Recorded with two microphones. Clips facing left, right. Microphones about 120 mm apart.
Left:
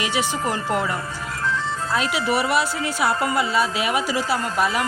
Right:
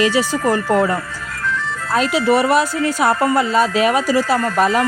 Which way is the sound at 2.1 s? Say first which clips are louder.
Right 8 dB; 40° right (ahead or behind).